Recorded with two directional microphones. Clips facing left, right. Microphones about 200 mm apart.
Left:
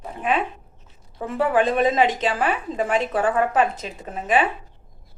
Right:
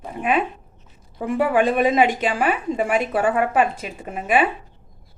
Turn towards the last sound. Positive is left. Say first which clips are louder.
# right 1 dB
turn(degrees=-10)  # may be behind; listen again after turning